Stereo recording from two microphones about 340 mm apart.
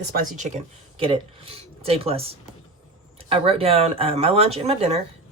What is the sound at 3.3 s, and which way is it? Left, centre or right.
Speech, centre.